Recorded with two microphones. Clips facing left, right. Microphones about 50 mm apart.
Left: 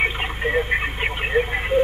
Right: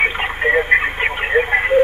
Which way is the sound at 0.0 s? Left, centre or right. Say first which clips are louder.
Right 5 dB; right.